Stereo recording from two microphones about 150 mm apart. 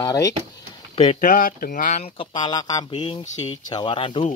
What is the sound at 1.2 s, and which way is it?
Speech, 65° left (ahead or behind).